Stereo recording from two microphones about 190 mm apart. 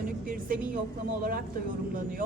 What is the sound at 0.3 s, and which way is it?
Speech, 45° right (ahead or behind).